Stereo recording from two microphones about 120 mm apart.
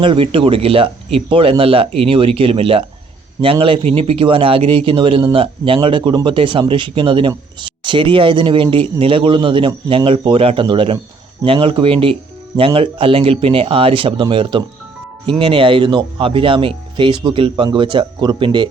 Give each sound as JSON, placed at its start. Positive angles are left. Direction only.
{"t": 0.0, "sound": "speech", "side_deg": -45}